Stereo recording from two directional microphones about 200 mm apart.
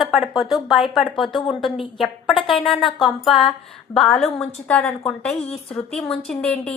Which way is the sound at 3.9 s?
Centre (ahead or behind).